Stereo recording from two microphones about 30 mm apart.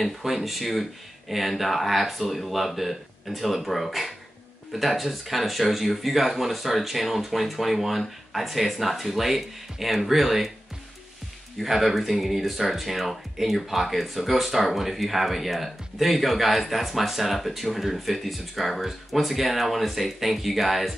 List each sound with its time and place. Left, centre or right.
0.2 s speech: centre
11.6 s speech: centre